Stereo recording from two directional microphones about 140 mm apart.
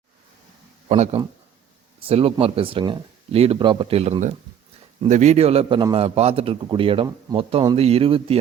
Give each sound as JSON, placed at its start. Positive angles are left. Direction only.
{"t": 0.9, "sound": "a man's voice", "side_deg": -55}
{"t": 5.0, "sound": "a man's voice", "side_deg": -55}